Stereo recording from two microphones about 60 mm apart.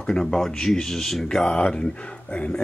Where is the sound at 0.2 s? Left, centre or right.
Centre.